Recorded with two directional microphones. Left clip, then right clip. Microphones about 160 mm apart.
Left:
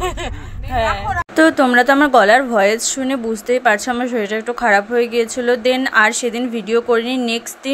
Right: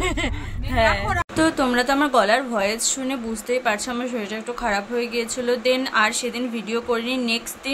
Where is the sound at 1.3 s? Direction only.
40° left (ahead or behind).